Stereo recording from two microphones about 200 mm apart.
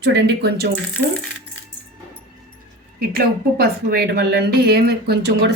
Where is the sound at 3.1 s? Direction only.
50° right (ahead or behind).